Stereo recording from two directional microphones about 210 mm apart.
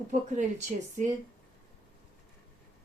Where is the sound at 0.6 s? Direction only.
35° right (ahead or behind).